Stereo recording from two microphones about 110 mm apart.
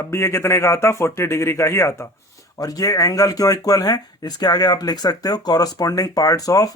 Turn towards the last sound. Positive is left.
turn(degrees=35)  # may be behind; listen again after turning